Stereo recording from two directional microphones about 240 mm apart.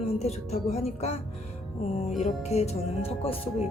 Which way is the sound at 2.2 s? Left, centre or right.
Left.